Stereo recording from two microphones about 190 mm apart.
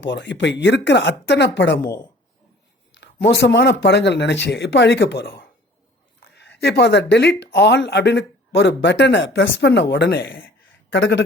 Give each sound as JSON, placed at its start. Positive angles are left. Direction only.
{"t": 0.0, "sound": "speech", "side_deg": 70}
{"t": 2.9, "sound": "speech", "side_deg": 65}
{"t": 10.8, "sound": "speech", "side_deg": 70}